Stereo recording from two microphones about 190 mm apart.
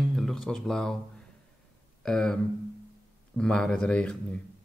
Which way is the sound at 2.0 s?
5° left (ahead or behind).